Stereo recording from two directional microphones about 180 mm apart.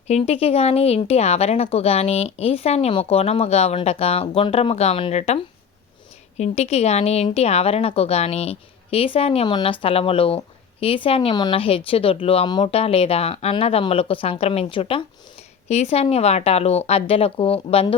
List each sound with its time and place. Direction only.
0.1 s a woman's voice: 35° left (ahead or behind)